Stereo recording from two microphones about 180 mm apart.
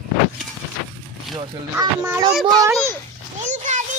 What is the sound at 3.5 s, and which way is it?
Speech, 40° right (ahead or behind).